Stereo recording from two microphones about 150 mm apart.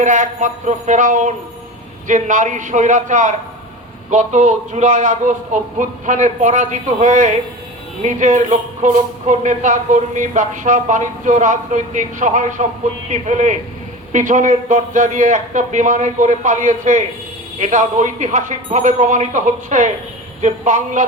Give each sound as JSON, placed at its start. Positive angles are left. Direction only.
{"t": 0.0, "sound": "a man's voice", "side_deg": -55}